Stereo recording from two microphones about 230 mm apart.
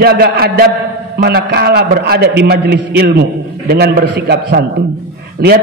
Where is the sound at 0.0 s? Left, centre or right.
Right.